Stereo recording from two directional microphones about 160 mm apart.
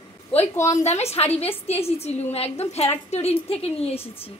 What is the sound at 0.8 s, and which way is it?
A woman's voice, 45° left (ahead or behind).